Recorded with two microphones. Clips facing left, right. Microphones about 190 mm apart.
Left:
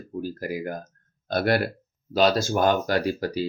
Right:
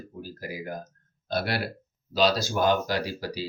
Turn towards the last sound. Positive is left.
turn(degrees=50)  # may be behind; listen again after turning